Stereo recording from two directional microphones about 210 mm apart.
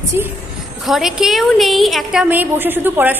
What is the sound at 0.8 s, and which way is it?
A woman's voice, centre (ahead or behind).